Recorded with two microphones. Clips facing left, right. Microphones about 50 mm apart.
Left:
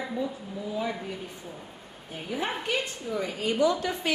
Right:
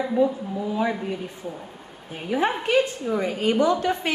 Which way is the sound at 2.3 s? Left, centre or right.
Right.